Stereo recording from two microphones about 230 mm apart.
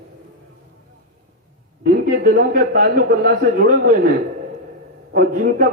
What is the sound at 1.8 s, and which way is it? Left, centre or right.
A man's voice, right.